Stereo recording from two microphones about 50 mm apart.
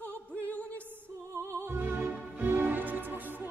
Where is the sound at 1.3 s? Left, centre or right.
Right.